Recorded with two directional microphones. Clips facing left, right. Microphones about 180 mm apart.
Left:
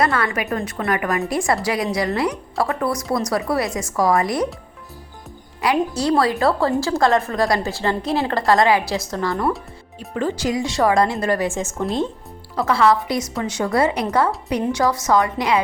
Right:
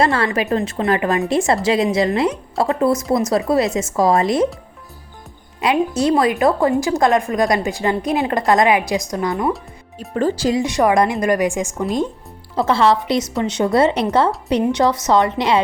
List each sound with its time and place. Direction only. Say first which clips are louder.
0.0 s a woman's voice: right 3 dB; 30° right (ahead or behind)
5.5 s a woman's voice: right 3 dB; 20° right (ahead or behind)
10.2 s a woman's voice: right 4 dB; 35° right (ahead or behind); by 11.7 s 15° right (ahead or behind)
12.5 s a woman's voice: right 2 dB; 25° right (ahead or behind)